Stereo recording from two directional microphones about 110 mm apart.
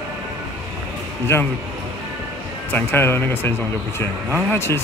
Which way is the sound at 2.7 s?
20° left (ahead or behind).